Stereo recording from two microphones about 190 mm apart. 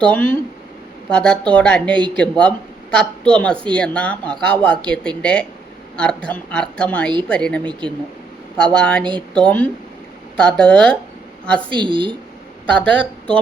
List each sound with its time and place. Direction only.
0.0 s a woman's voice: 10° left (ahead or behind)
7.6 s a woman's voice: 25° right (ahead or behind)
8.5 s a woman's voice: 5° left (ahead or behind)
11.7 s a woman's voice: 25° right (ahead or behind)
12.7 s speech: 5° left (ahead or behind)